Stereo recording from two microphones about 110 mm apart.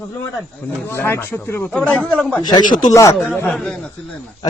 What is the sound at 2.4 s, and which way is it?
Speech, 40° left (ahead or behind).